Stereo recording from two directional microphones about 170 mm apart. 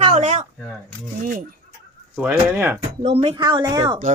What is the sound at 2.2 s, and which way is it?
Speech, 15° right (ahead or behind).